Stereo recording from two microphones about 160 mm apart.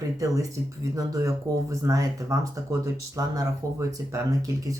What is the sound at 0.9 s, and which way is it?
Speech, 20° right (ahead or behind).